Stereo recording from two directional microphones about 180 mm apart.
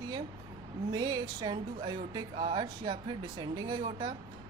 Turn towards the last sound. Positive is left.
turn(degrees=-25)  # may be behind; listen again after turning